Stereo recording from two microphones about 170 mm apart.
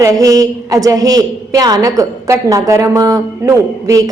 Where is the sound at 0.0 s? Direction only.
20° right (ahead or behind).